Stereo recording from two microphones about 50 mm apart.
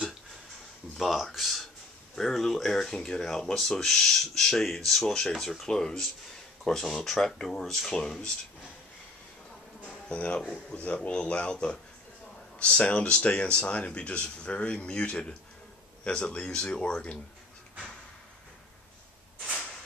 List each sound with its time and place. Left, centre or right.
0.9 s speech: centre
9.8 s speech: left